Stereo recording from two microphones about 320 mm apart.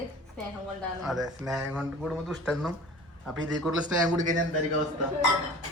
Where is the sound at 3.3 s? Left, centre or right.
Right.